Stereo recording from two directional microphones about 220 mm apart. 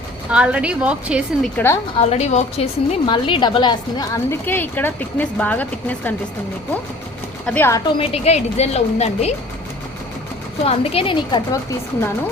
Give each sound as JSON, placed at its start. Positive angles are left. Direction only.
{"t": 0.3, "sound": "a woman's voice", "side_deg": -5}
{"t": 1.5, "sound": "a woman's voice", "side_deg": 10}
{"t": 2.0, "sound": "a woman's voice", "side_deg": 30}
{"t": 7.4, "sound": "a woman's voice", "side_deg": 10}
{"t": 7.9, "sound": "a woman's voice", "side_deg": 25}
{"t": 10.6, "sound": "a woman's voice", "side_deg": 25}